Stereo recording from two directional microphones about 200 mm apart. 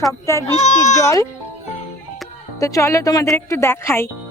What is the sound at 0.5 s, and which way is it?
Speech, 35° left (ahead or behind).